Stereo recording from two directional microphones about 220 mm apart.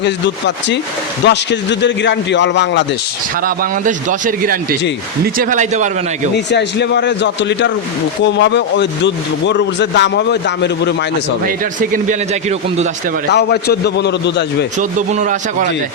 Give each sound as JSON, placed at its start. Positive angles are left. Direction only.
{"t": 0.0, "sound": "speech", "side_deg": 55}
{"t": 3.4, "sound": "a man's voice", "side_deg": -40}
{"t": 6.3, "sound": "speech", "side_deg": 50}
{"t": 11.4, "sound": "a man's voice", "side_deg": -40}
{"t": 13.3, "sound": "speech", "side_deg": 50}
{"t": 14.8, "sound": "a man's voice", "side_deg": -35}